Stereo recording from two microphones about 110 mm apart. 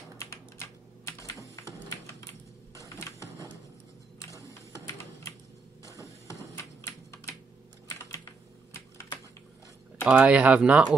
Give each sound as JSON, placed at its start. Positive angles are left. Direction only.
{"t": 0.2, "sound": "typing", "side_deg": 25}
{"t": 6.2, "sound": "a sound", "side_deg": 25}
{"t": 10.0, "sound": "speech", "side_deg": -10}